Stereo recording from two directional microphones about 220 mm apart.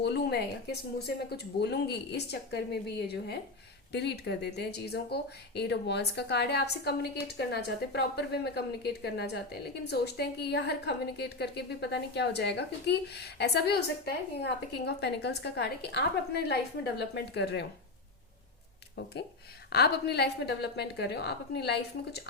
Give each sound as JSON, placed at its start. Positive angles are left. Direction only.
{"t": 0.0, "sound": "a woman's voice", "side_deg": 50}
{"t": 19.0, "sound": "a woman's voice", "side_deg": 50}